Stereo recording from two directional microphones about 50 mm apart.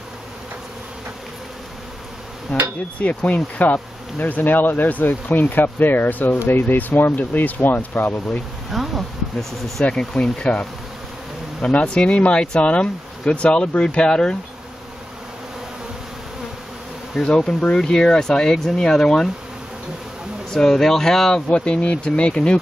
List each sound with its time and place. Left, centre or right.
3.0 s speech: left
8.6 s speech: centre
9.9 s speech: centre
17.1 s speech: centre
20.5 s speech: centre
21.5 s speech: left